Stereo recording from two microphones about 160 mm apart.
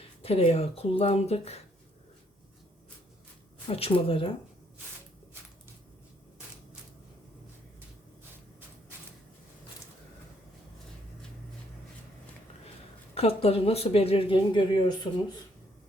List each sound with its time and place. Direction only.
0.2 s speech: 40° left (ahead or behind)
3.7 s speech: 35° left (ahead or behind)
13.1 s speech: 40° left (ahead or behind)